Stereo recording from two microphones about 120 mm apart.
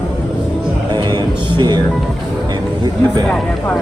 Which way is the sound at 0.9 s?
35° right (ahead or behind).